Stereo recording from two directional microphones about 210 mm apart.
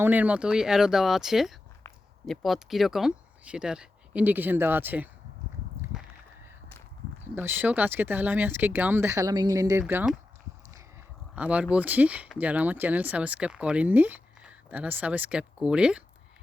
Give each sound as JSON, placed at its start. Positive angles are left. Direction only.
{"t": 0.0, "sound": "speech", "side_deg": -10}
{"t": 5.8, "sound": "a sound", "side_deg": 0}
{"t": 7.3, "sound": "speech", "side_deg": -10}
{"t": 11.3, "sound": "speech", "side_deg": -5}